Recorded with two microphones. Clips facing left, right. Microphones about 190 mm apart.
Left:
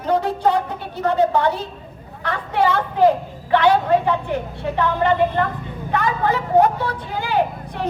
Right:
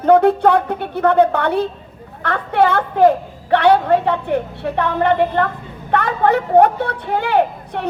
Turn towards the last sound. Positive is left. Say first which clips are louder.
# right 4 dB
turn(degrees=-65)  # may be behind; listen again after turning